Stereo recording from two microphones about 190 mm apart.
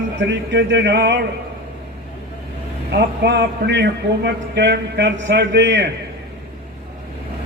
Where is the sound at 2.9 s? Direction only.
60° right (ahead or behind).